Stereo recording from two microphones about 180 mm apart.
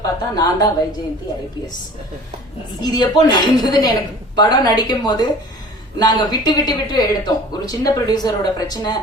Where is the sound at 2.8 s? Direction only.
20° left (ahead or behind).